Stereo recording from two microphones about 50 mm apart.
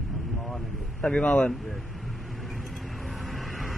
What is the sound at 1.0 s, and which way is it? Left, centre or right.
Speech, centre.